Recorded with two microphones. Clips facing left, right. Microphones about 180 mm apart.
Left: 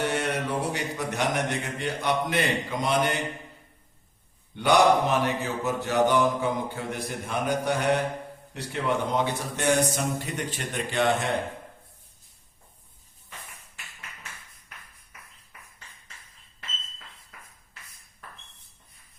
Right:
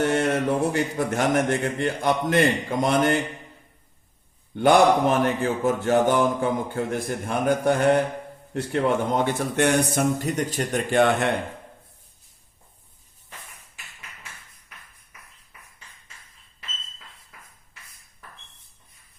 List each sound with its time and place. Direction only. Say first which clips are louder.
0.0 s speech: right 6 dB; 50° right (ahead or behind)
4.5 s speech: right 3 dB; 50° right (ahead or behind)